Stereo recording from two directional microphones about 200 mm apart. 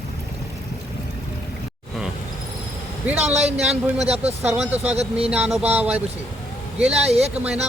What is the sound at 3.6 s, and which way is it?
Speech, 5° right (ahead or behind).